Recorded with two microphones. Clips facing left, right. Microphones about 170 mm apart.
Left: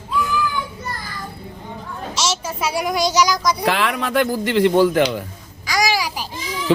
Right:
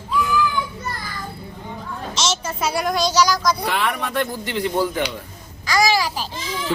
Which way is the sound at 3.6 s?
90° left.